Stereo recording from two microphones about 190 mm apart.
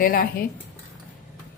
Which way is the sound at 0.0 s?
50° left (ahead or behind).